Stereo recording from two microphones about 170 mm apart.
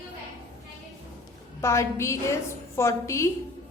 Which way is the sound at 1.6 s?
15° left (ahead or behind).